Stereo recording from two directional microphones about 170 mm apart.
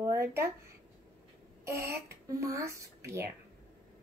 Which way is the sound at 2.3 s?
20° right (ahead or behind).